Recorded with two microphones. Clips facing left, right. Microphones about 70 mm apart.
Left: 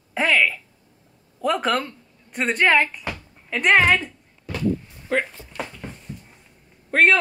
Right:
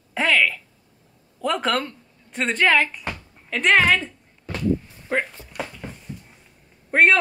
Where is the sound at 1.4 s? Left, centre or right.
Centre.